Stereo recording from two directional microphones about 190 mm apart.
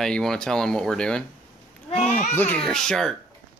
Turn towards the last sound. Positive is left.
turn(degrees=5)  # may be behind; listen again after turning